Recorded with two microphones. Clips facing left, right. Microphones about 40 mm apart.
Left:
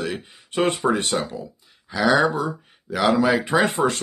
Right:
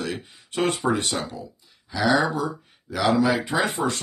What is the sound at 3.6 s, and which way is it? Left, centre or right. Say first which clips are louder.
Speech: left 4 dB; left.